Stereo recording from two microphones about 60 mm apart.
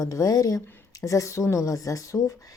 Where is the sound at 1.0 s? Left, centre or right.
Left.